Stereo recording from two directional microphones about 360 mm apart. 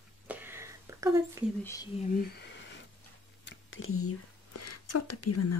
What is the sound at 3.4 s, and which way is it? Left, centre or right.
Speech, left.